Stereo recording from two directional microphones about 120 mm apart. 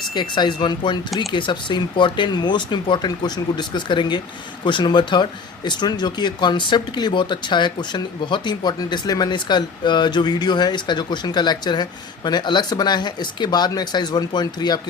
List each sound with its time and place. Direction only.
0.1 s speech: 40° left (ahead or behind)